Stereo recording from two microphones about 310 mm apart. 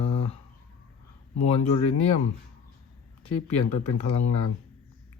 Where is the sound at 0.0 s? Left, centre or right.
Centre.